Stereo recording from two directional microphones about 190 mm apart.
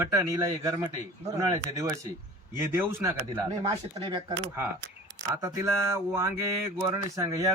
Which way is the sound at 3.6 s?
30° right (ahead or behind).